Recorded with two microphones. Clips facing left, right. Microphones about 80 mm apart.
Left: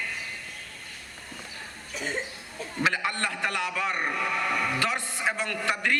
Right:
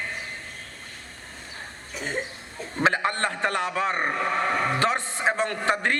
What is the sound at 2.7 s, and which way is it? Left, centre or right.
A man's voice, right.